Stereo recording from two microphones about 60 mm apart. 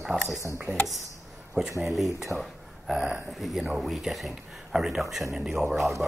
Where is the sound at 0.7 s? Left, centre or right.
Right.